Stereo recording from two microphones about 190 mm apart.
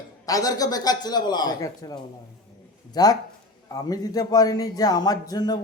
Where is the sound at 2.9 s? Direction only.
20° left (ahead or behind).